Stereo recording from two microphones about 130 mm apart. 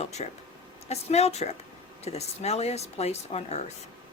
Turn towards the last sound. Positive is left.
turn(degrees=55)  # may be behind; listen again after turning